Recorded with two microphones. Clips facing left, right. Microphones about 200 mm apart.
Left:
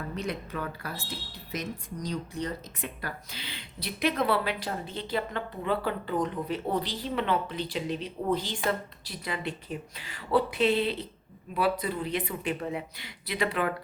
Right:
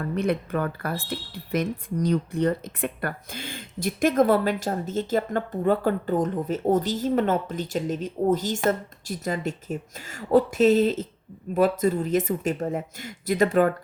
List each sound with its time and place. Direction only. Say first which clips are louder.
0.2 s speech: right 10 dB; 55° right (ahead or behind)